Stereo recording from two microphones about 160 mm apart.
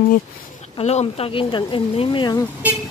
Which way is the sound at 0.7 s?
40° left (ahead or behind).